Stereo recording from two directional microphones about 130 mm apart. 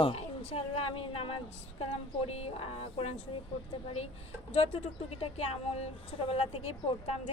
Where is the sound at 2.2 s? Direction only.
50° left (ahead or behind).